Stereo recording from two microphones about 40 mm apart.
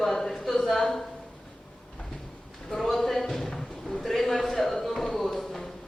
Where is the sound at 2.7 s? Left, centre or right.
Centre.